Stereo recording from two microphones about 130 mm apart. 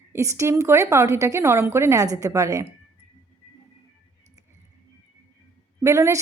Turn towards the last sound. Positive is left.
turn(degrees=-25)  # may be behind; listen again after turning